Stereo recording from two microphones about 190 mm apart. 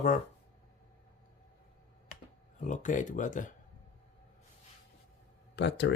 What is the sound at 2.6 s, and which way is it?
Speech, 40° left (ahead or behind).